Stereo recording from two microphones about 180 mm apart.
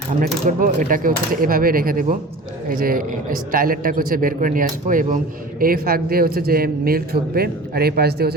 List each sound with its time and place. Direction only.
0.2 s a man's voice: 45° right (ahead or behind)